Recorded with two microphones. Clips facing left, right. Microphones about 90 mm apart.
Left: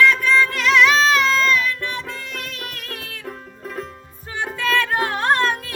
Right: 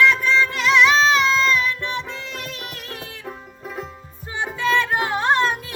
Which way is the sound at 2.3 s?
45° left (ahead or behind).